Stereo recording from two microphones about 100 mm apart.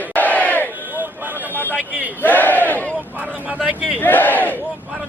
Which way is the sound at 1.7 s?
15° right (ahead or behind).